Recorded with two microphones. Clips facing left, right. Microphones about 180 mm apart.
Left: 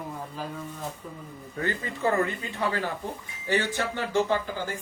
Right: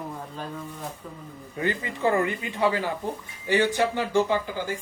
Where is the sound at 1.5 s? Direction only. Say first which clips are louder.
Right 3 dB; 15° right (ahead or behind).